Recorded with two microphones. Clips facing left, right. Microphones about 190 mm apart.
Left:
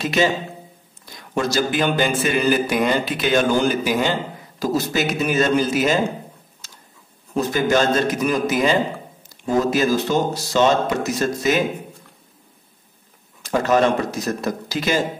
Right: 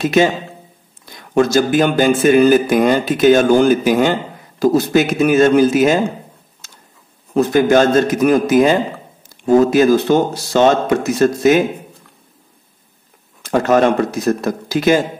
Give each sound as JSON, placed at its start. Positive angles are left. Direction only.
{"t": 0.0, "sound": "a man's voice", "side_deg": -50}
{"t": 1.3, "sound": "a man's voice", "side_deg": -50}
{"t": 6.6, "sound": "a sound", "side_deg": -55}
{"t": 7.3, "sound": "a man's voice", "side_deg": -55}
{"t": 13.4, "sound": "a man's voice", "side_deg": -55}